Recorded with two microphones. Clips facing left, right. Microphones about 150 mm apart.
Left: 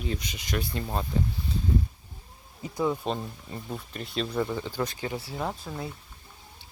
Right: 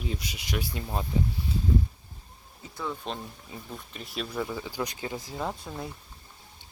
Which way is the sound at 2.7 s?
20° left (ahead or behind).